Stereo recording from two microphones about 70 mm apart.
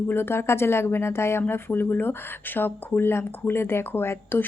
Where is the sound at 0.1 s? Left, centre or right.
Left.